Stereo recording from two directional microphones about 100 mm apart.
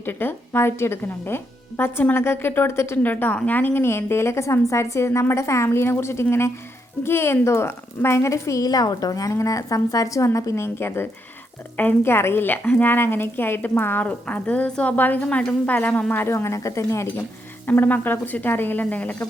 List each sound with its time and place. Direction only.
0.0 s a woman's voice: 20° left (ahead or behind)
17.7 s a woman's voice: 15° left (ahead or behind)